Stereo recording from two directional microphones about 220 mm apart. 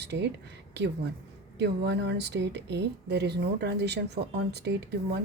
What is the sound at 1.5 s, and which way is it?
A woman's voice, 50° right (ahead or behind).